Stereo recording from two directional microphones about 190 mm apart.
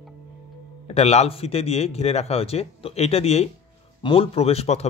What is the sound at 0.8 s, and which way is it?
Speech, 35° left (ahead or behind).